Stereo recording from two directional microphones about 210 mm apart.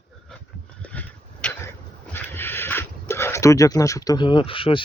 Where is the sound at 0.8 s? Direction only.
5° left (ahead or behind).